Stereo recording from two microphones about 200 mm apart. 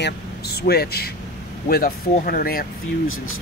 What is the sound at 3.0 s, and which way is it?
Speech, 90° left.